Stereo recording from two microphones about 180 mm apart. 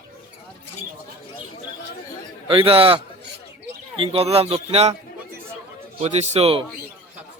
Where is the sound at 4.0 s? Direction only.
30° right (ahead or behind).